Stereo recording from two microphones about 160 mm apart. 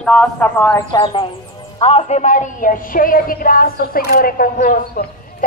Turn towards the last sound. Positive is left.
turn(degrees=65)  # may be behind; listen again after turning